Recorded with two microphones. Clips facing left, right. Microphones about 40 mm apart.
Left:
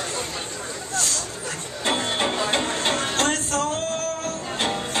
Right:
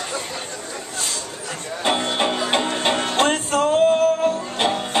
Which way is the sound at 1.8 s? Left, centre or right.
Centre.